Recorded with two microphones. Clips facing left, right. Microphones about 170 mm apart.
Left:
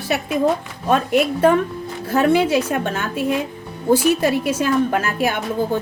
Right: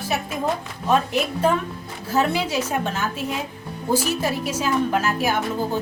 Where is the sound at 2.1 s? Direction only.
55° left (ahead or behind).